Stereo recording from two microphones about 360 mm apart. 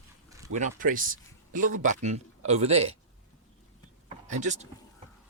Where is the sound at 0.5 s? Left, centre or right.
Right.